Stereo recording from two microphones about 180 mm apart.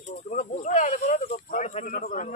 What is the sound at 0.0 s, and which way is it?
Speech, 45° left (ahead or behind).